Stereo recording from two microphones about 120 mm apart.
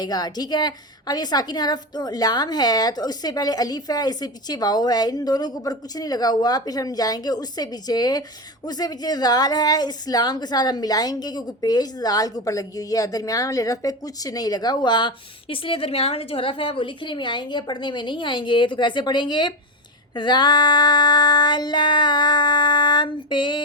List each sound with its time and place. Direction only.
0.0 s a woman's voice: 35° left (ahead or behind)